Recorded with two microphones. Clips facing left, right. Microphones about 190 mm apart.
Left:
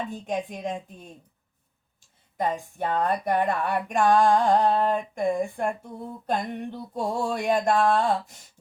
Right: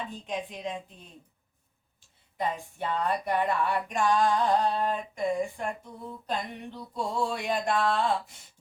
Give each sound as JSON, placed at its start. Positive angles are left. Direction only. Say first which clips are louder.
{"t": 0.1, "sound": "speech", "louder": "left 5 dB", "side_deg": 45}
{"t": 2.4, "sound": "speech", "louder": "left 4 dB", "side_deg": 50}